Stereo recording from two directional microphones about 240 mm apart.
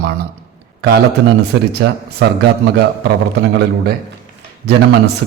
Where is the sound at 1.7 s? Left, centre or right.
Right.